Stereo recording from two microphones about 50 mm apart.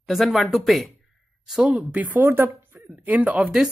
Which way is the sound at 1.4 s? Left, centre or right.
Centre.